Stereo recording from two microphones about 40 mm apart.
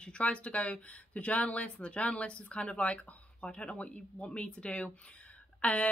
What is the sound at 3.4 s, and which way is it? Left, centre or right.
A woman's voice, left.